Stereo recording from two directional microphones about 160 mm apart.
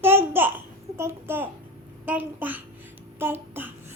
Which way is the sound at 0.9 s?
15° right (ahead or behind).